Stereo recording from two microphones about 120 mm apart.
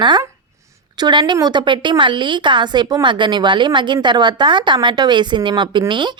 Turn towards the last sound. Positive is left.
turn(degrees=-40)  # may be behind; listen again after turning